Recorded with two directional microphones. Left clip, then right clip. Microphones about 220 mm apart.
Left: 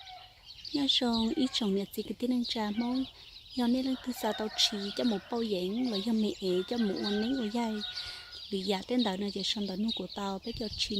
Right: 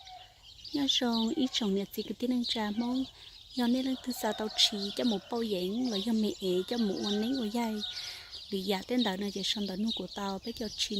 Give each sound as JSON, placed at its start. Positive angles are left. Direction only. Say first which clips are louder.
{"t": 0.7, "sound": "speech", "louder": "left 1 dB", "side_deg": 5}
{"t": 4.7, "sound": "speech", "louder": "right 1 dB", "side_deg": -20}
{"t": 5.3, "sound": "speech", "louder": "even", "side_deg": 5}